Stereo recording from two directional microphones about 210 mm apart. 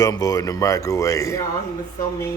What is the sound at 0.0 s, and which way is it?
Speech, 15° left (ahead or behind).